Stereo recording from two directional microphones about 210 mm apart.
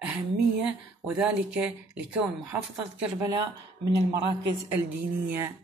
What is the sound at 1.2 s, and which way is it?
Speech, 5° right (ahead or behind).